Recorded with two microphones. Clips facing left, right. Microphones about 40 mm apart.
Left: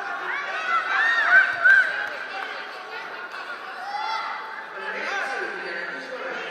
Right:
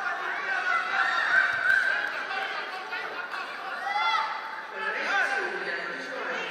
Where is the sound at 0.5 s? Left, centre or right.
Left.